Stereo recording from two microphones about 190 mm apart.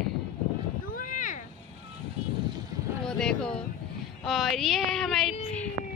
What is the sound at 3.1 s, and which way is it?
Speech, 5° left (ahead or behind).